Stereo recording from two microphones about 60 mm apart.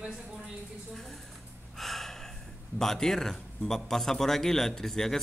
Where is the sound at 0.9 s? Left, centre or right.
Centre.